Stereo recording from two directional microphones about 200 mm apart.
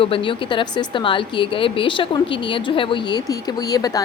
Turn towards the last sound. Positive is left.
turn(degrees=20)  # may be behind; listen again after turning